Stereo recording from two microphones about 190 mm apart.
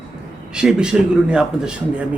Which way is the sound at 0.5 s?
5° right (ahead or behind).